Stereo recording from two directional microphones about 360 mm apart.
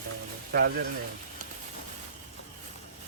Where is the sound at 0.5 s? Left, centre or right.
Right.